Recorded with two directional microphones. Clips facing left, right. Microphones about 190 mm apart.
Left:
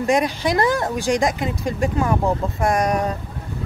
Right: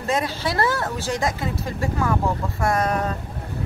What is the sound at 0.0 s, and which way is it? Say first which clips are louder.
A woman's voice: left 5 dB; 15° left (ahead or behind).